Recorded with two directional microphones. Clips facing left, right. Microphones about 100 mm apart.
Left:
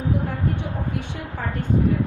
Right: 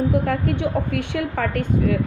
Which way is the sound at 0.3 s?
90° right.